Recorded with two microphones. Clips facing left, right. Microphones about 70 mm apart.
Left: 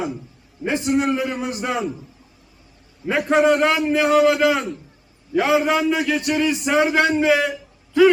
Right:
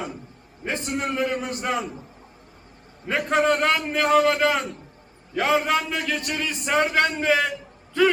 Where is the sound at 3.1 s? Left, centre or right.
Centre.